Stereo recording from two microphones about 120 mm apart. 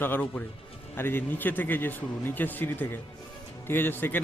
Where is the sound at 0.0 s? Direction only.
15° left (ahead or behind).